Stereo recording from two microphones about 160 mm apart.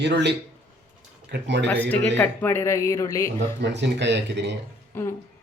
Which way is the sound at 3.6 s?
90° right.